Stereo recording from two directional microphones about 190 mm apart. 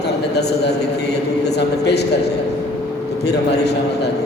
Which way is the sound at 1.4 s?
60° left (ahead or behind).